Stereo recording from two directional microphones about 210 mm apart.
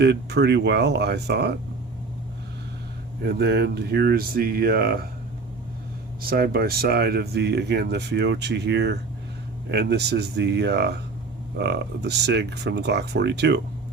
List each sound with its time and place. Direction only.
0.0 s speech: 55° right (ahead or behind)
3.2 s speech: 50° right (ahead or behind)
6.2 s speech: 45° right (ahead or behind)